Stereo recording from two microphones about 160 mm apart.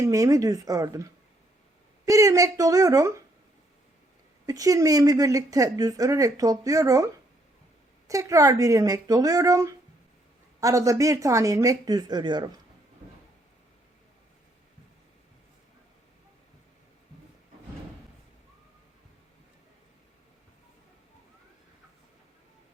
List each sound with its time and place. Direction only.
0.0 s a woman's voice: 20° right (ahead or behind)
4.4 s a woman's voice: 20° right (ahead or behind)